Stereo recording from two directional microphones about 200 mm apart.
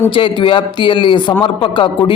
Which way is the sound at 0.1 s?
25° left (ahead or behind).